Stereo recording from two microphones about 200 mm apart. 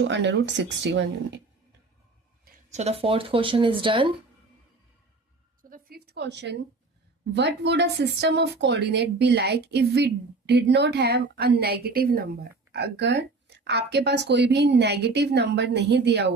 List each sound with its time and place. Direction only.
0.0 s speech: 60° right (ahead or behind)
2.7 s speech: 30° right (ahead or behind)
5.6 s a sound: 45° right (ahead or behind)
7.3 s speech: 60° right (ahead or behind)